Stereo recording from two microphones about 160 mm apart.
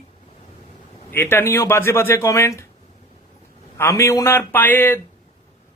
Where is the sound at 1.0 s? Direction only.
15° left (ahead or behind).